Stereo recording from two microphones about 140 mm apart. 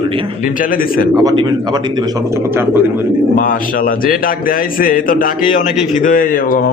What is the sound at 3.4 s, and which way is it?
A man's voice, 85° left.